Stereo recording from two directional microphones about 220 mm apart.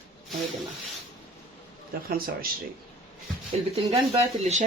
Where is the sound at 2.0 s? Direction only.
40° right (ahead or behind).